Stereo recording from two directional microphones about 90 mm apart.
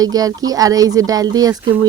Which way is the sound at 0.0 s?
45° right (ahead or behind).